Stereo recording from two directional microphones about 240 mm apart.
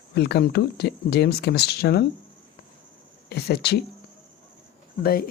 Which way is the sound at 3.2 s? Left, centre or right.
Left.